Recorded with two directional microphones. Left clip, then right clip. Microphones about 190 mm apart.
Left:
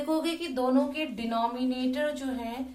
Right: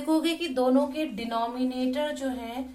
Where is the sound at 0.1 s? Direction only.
40° right (ahead or behind).